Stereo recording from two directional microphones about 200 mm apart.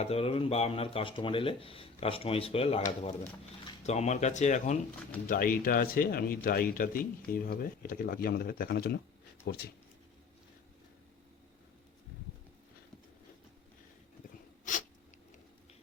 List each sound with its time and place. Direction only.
0.0 s speech: 30° left (ahead or behind)
3.8 s speech: 35° left (ahead or behind); by 9.6 s 50° left (ahead or behind)
14.6 s a sound: 40° left (ahead or behind)